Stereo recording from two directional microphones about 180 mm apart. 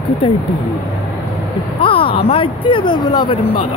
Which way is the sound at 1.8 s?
30° left (ahead or behind).